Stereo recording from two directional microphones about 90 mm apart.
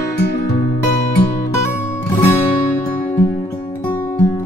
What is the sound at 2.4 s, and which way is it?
Music, 20° left (ahead or behind).